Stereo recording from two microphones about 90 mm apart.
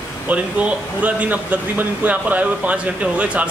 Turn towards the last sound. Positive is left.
turn(degrees=-15)  # may be behind; listen again after turning